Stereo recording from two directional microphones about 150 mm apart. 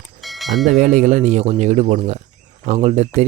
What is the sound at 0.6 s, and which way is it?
Speech, 55° right (ahead or behind).